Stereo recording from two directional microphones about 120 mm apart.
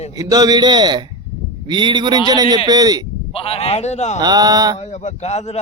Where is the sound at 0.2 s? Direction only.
30° right (ahead or behind).